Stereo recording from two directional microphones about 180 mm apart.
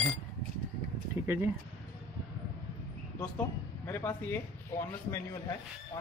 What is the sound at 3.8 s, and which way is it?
Speech, 10° left (ahead or behind).